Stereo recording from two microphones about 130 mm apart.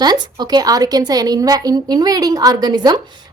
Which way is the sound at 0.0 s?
30° right (ahead or behind).